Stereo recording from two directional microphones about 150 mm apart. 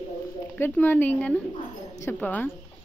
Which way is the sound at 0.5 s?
15° left (ahead or behind).